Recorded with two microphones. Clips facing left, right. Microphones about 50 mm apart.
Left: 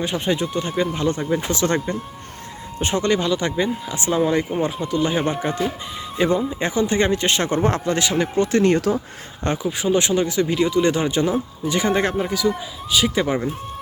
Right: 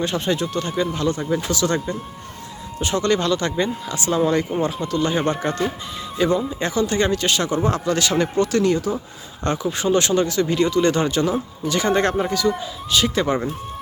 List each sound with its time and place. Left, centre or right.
0.0 s speech: centre
0.9 s speech: left; by 5.7 s centre
6.1 s speech: left
7.5 s speech: left
7.9 s speech: centre
8.9 s speech: left
9.6 s speech: centre